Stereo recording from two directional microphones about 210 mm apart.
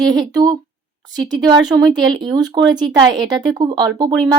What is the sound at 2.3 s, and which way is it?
Speech, 20° right (ahead or behind).